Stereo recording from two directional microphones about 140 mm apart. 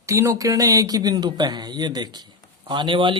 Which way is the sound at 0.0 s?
20° right (ahead or behind).